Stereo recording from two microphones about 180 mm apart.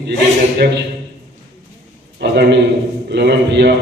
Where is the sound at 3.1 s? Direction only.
70° right (ahead or behind).